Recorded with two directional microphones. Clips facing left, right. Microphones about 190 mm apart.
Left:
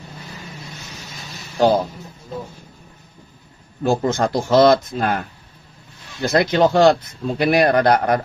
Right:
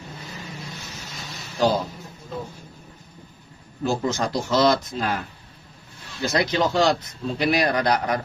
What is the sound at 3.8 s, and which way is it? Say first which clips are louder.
A man's voice: left 5 dB; 55° left (ahead or behind).